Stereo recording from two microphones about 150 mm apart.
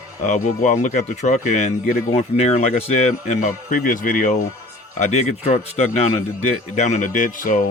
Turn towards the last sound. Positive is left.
turn(degrees=60)  # may be behind; listen again after turning